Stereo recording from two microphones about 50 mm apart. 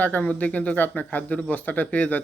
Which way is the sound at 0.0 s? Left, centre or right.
Left.